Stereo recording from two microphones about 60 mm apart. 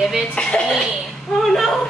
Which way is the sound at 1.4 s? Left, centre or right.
Centre.